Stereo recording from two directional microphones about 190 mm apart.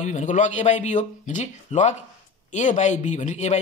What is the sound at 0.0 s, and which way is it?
Speech, 40° left (ahead or behind).